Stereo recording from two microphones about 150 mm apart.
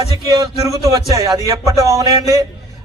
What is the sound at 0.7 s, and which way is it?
A man's voice, 25° right (ahead or behind).